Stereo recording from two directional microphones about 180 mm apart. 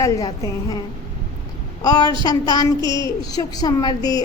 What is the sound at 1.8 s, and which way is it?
Speech, 20° left (ahead or behind).